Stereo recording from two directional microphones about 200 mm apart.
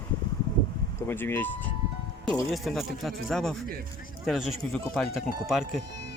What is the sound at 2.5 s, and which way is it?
Speech, centre (ahead or behind).